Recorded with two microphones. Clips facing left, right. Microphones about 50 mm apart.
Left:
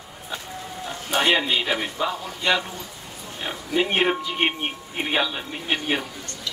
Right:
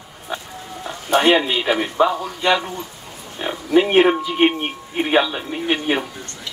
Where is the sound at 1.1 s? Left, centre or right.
Centre.